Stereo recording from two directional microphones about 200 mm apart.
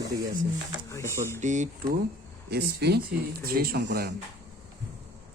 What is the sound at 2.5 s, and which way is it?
Speech, 55° right (ahead or behind).